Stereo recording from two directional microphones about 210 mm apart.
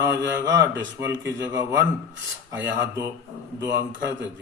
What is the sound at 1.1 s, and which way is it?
Speech, 15° right (ahead or behind).